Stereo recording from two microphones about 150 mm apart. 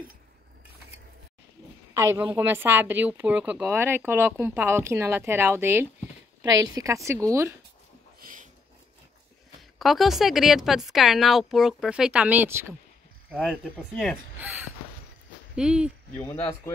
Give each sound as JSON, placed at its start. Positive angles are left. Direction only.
{"t": 2.0, "sound": "a woman's voice", "side_deg": -20}
{"t": 8.2, "sound": "a sound", "side_deg": -65}
{"t": 9.6, "sound": "a woman's voice", "side_deg": 0}
{"t": 14.4, "sound": "speech", "side_deg": -10}